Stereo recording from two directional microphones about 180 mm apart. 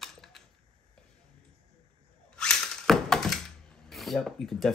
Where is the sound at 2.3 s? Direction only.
5° left (ahead or behind).